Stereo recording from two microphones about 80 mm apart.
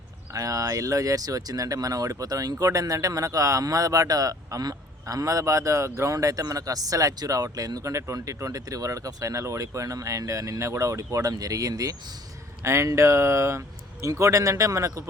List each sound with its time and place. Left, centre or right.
0.3 s speech: right